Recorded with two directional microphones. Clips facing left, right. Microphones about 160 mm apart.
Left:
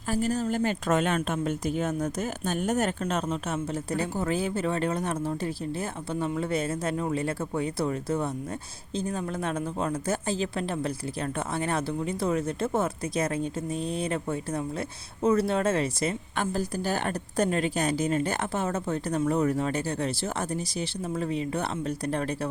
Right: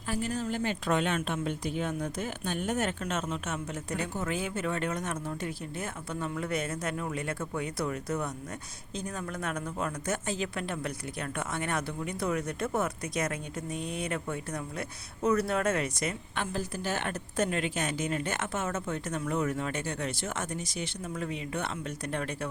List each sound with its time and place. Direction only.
0.1 s a woman's voice: 40° left (ahead or behind)